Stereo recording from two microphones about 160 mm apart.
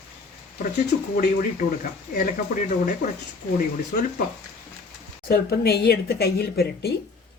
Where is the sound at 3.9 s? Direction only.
65° left (ahead or behind).